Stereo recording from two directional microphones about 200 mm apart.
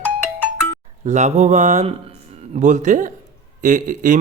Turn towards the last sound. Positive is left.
turn(degrees=-40)  # may be behind; listen again after turning